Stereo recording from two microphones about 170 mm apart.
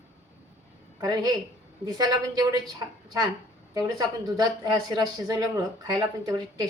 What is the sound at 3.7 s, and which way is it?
Speech, 20° right (ahead or behind).